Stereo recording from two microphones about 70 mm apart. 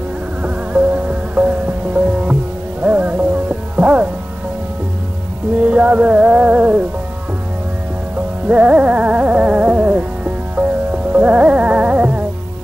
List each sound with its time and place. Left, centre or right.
0.4 s music: right
5.7 s music: centre
8.5 s music: centre